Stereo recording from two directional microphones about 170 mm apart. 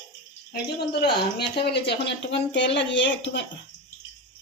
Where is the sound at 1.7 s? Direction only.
80° left.